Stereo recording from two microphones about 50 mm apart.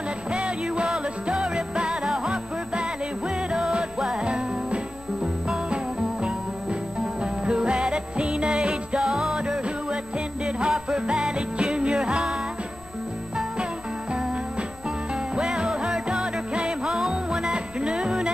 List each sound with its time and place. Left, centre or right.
0.3 s music: right
7.6 s music: centre
15.3 s music: centre